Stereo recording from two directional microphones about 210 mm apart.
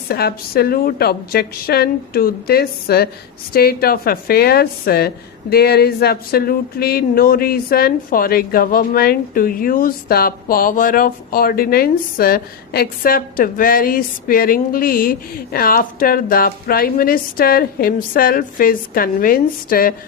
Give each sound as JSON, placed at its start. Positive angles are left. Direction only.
{"t": 0.1, "sound": "a woman's voice", "side_deg": 50}